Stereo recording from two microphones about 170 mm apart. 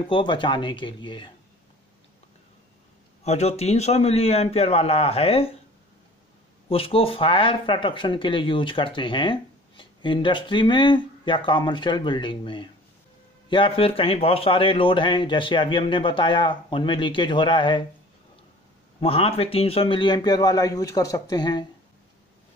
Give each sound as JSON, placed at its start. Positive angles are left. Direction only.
{"t": 0.0, "sound": "speech", "side_deg": 30}
{"t": 3.3, "sound": "a man's voice", "side_deg": 40}
{"t": 6.7, "sound": "speech", "side_deg": 35}
{"t": 18.9, "sound": "speech", "side_deg": 35}